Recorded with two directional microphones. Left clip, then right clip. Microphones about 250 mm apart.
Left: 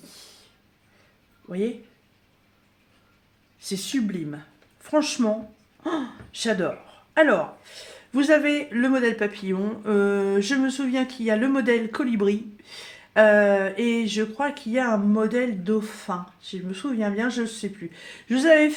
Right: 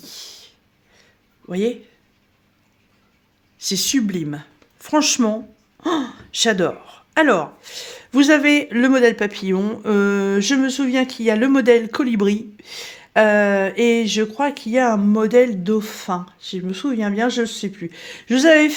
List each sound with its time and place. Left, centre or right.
0.0 s a sound: right
1.5 s speech: right
3.6 s speech: right